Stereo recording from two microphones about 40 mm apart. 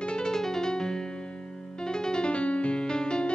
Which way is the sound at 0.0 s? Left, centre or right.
Left.